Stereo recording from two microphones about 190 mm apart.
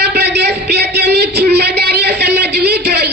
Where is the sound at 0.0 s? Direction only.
60° right (ahead or behind).